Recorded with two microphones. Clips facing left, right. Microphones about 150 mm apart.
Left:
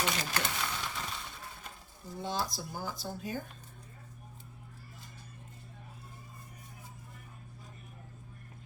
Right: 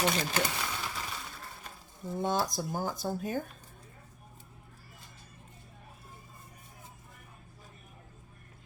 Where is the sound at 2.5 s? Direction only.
50° right (ahead or behind).